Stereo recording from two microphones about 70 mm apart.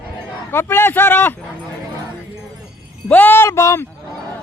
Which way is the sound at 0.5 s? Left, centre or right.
Left.